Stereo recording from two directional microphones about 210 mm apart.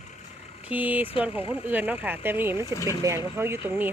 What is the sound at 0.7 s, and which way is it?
Speech, 10° right (ahead or behind).